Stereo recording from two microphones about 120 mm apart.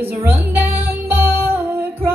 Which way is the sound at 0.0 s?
15° right (ahead or behind).